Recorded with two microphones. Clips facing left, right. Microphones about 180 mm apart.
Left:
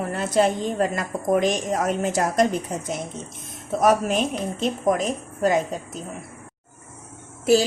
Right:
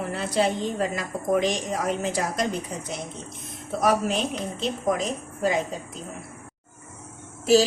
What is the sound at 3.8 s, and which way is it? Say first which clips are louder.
Speech: left 3 dB; 45° left (ahead or behind).